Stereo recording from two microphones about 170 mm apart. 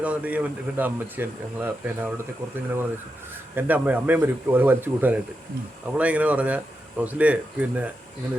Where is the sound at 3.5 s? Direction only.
10° right (ahead or behind).